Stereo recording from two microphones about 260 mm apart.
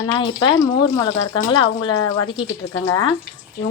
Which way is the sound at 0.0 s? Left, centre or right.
Centre.